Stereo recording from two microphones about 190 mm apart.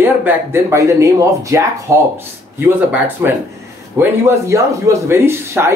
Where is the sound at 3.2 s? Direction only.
10° right (ahead or behind).